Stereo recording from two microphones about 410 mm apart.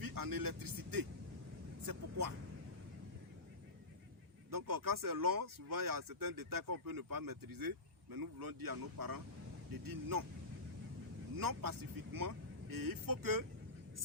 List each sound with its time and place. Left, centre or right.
0.0 s speech: right
1.8 s vehicle: right
4.5 s speech: right
11.3 s speech: right